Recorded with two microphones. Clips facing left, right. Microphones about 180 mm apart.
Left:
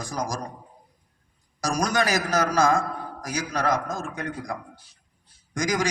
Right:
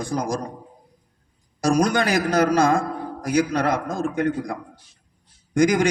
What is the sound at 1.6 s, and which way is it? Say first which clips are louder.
A man's voice: right 5 dB; 60° right (ahead or behind).